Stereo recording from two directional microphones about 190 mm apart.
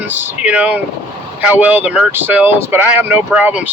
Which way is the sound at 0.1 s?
10° right (ahead or behind).